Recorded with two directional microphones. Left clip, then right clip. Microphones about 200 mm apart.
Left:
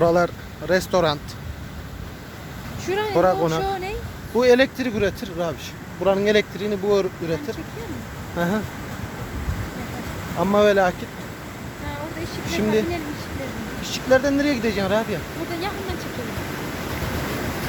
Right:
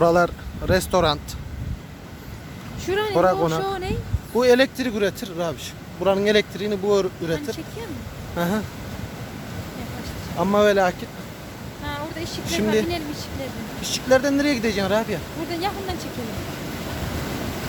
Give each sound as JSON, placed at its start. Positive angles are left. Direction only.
{"t": 0.0, "sound": "speech", "side_deg": -10}
{"t": 2.8, "sound": "speech", "side_deg": -55}
{"t": 3.2, "sound": "speech", "side_deg": -10}
{"t": 3.6, "sound": "speech", "side_deg": -55}
{"t": 4.4, "sound": "speech", "side_deg": -10}
{"t": 10.3, "sound": "speech", "side_deg": -10}
{"t": 11.9, "sound": "a sound", "side_deg": -20}
{"t": 12.5, "sound": "speech", "side_deg": -10}